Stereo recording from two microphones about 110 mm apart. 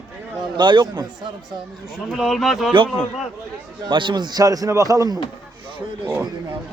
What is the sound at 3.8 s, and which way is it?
A man's voice, 45° right (ahead or behind).